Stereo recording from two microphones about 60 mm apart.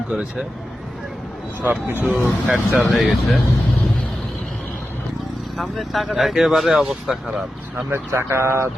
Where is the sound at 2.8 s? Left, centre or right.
Centre.